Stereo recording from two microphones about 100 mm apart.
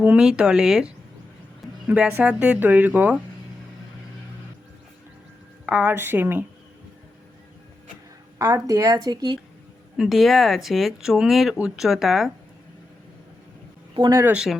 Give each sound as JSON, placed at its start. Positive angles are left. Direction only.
{"t": 0.0, "sound": "speech", "side_deg": -10}
{"t": 1.9, "sound": "speech", "side_deg": -15}
{"t": 5.6, "sound": "a woman's voice", "side_deg": -15}
{"t": 8.4, "sound": "a woman's voice", "side_deg": -40}
{"t": 10.0, "sound": "speech", "side_deg": 0}
{"t": 14.1, "sound": "a woman's voice", "side_deg": -25}